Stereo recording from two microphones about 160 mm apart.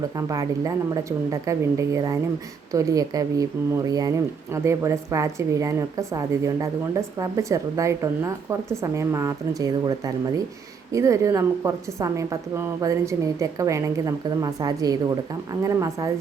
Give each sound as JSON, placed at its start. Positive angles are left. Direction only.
{"t": 0.2, "sound": "a woman's voice", "side_deg": -20}